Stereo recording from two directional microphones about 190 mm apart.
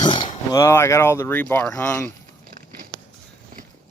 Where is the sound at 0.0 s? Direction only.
25° left (ahead or behind).